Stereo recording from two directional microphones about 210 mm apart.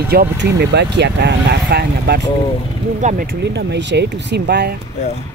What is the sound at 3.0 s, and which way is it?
Speech, 35° right (ahead or behind).